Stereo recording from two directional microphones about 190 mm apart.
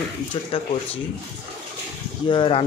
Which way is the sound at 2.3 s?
25° left (ahead or behind).